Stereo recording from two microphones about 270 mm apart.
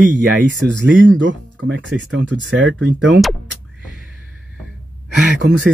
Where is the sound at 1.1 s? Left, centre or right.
Right.